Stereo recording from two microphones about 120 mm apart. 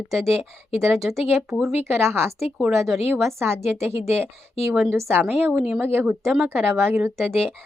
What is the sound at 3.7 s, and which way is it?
Speech, 20° right (ahead or behind).